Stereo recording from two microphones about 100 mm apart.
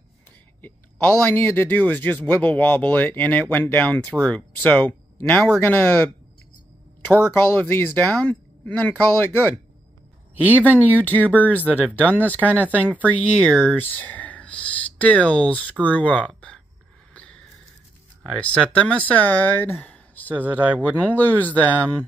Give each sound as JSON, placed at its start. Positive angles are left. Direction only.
{"t": 1.2, "sound": "speech", "side_deg": 20}
{"t": 10.9, "sound": "speech", "side_deg": 15}
{"t": 17.1, "sound": "a sound", "side_deg": 10}
{"t": 18.4, "sound": "speech", "side_deg": 15}
{"t": 20.5, "sound": "speech", "side_deg": -15}
{"t": 21.0, "sound": "speech", "side_deg": 15}